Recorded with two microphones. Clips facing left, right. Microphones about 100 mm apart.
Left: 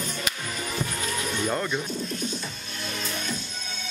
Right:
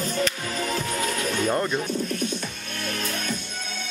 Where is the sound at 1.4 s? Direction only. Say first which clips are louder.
Right 3 dB; 5° right (ahead or behind).